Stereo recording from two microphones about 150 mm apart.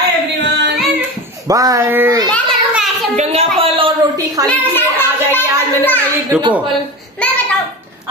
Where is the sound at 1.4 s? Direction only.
20° right (ahead or behind).